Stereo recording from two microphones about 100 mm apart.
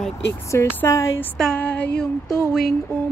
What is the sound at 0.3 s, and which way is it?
Speech, 25° left (ahead or behind).